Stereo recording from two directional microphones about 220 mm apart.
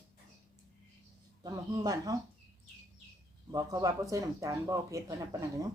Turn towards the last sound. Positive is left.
turn(degrees=-15)  # may be behind; listen again after turning